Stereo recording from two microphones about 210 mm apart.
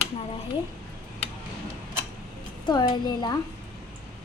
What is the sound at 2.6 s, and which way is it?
Speech, 20° left (ahead or behind).